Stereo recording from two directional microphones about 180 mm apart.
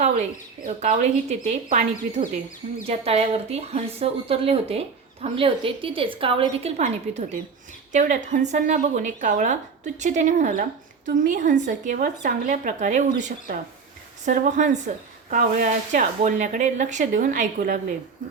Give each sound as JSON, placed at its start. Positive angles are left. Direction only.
{"t": 0.8, "sound": "a woman's voice", "side_deg": -40}